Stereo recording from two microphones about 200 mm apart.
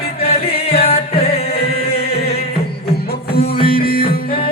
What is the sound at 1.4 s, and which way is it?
Chant, 50° left (ahead or behind).